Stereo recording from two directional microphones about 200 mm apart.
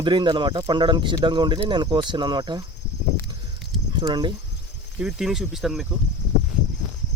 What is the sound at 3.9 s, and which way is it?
Speech, 25° right (ahead or behind).